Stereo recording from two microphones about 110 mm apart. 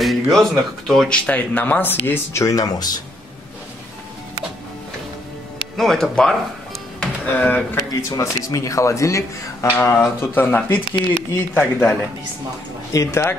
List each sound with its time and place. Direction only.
0.0 s speech: centre (ahead or behind); by 3.0 s 35° left (ahead or behind)
5.8 s speech: 5° left (ahead or behind)
7.0 s speech: 15° left (ahead or behind)
8.1 s a man's voice: 30° left (ahead or behind); by 12.0 s 15° left (ahead or behind)
12.9 s a man's voice: 25° left (ahead or behind)